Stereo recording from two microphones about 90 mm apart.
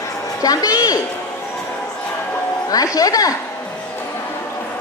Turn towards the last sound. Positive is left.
turn(degrees=40)  # may be behind; listen again after turning